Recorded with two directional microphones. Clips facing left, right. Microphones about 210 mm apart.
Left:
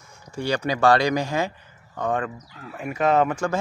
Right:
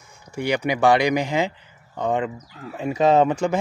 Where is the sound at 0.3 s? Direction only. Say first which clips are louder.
Right 2 dB; 15° right (ahead or behind).